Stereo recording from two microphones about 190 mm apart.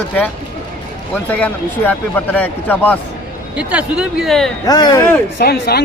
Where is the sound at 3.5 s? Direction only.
5° right (ahead or behind).